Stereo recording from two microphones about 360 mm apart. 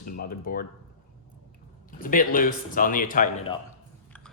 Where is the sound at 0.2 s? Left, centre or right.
Left.